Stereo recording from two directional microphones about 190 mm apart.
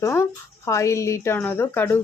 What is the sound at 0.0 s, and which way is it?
Speech, 15° left (ahead or behind).